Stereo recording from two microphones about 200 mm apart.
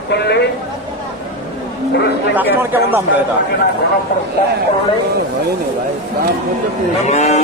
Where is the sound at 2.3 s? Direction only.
10° right (ahead or behind).